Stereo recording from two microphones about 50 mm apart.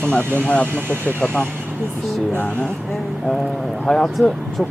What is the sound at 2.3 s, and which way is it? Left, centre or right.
Speech, left.